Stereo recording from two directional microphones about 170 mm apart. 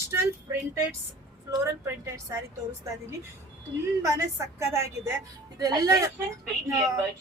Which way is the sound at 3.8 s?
15° right (ahead or behind).